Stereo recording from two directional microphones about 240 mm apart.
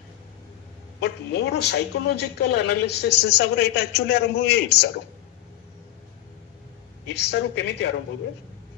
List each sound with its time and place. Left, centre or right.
1.0 s speech: left
7.2 s speech: left